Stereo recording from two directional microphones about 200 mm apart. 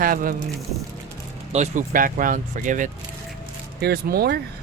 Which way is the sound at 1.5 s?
35° right (ahead or behind).